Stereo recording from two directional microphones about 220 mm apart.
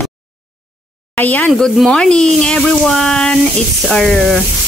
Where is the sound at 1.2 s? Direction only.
5° left (ahead or behind).